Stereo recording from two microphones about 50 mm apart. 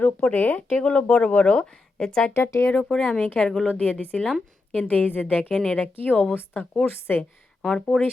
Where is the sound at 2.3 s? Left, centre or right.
Left.